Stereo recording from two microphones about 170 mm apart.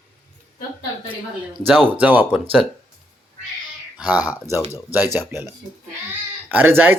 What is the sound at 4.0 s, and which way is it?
Speech, 10° right (ahead or behind).